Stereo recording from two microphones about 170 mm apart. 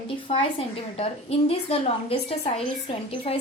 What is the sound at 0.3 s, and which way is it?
Speech, 30° left (ahead or behind).